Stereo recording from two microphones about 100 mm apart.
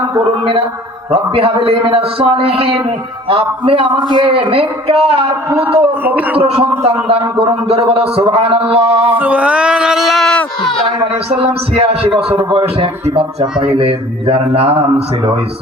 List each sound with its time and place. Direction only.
1.1 s a man's voice: 65° right (ahead or behind)
3.7 s a man's voice: 55° right (ahead or behind)
4.4 s a man's voice: 70° right (ahead or behind)
6.1 s speech: 15° right (ahead or behind)
6.3 s a man's voice: 75° right (ahead or behind)
9.1 s speech: 15° right (ahead or behind); by 10.4 s 5° left (ahead or behind)
11.3 s a man's voice: 75° right (ahead or behind)
12.5 s a man's voice: 65° right (ahead or behind)